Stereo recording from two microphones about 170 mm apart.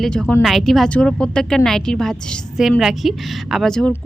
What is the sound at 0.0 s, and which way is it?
A woman's voice, 5° left (ahead or behind).